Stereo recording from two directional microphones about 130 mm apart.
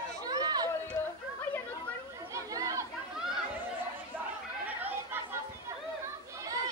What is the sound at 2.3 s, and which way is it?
Chatter, 25° right (ahead or behind).